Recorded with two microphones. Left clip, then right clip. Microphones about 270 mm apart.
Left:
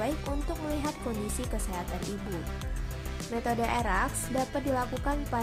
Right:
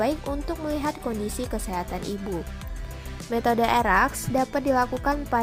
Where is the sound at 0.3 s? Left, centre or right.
Right.